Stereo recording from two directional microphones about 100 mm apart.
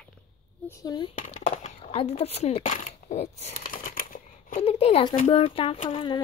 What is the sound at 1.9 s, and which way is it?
Speech, 90° left.